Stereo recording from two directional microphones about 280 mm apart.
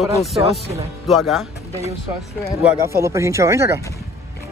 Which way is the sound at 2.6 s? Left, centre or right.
Centre.